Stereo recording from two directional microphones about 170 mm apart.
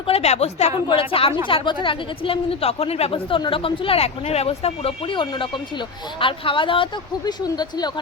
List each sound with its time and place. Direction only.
0.1 s speech: 40° left (ahead or behind)